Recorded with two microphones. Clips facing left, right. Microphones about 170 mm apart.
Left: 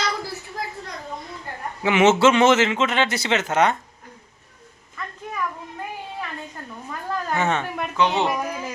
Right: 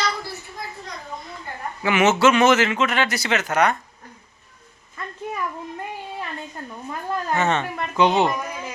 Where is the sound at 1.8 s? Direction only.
25° left (ahead or behind).